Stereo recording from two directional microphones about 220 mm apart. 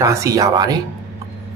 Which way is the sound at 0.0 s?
15° right (ahead or behind).